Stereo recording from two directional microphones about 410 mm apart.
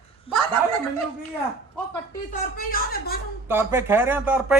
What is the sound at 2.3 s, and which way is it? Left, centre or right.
Speech, left.